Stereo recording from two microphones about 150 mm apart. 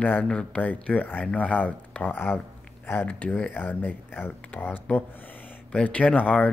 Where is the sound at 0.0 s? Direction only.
10° left (ahead or behind).